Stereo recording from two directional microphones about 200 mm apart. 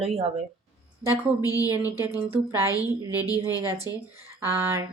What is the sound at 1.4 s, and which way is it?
Speech, 15° left (ahead or behind).